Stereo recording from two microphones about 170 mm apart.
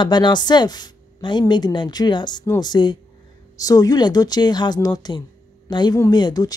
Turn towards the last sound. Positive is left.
turn(degrees=25)  # may be behind; listen again after turning